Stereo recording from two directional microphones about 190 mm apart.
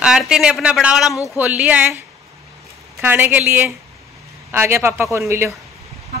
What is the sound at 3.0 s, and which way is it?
Speech, 10° right (ahead or behind).